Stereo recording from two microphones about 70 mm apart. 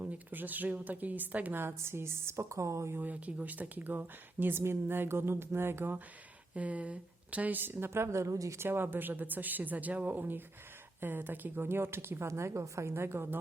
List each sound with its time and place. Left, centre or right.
0.0 s a woman's voice: right
3.0 s speech: right
6.5 s speech: centre; by 8.5 s right
8.5 s a woman's voice: right